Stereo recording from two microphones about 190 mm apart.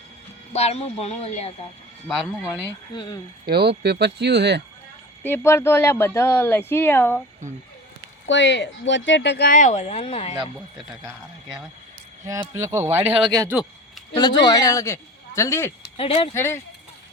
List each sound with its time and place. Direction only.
0.5 s speech: 35° left (ahead or behind)
2.0 s speech: 5° right (ahead or behind)
2.9 s speech: 25° left (ahead or behind)
3.4 s speech: 60° right (ahead or behind)
5.2 s speech: 10° left (ahead or behind)
8.3 s speech: 70° left (ahead or behind)
9.5 s speech: 40° left (ahead or behind)
10.8 s speech: centre (ahead or behind)
12.2 s speech: 15° right (ahead or behind)
13.5 s a sound: 5° right (ahead or behind)
14.4 s speech: 20° left (ahead or behind)
16.0 s speech: 30° left (ahead or behind)
16.3 s speech: 15° left (ahead or behind)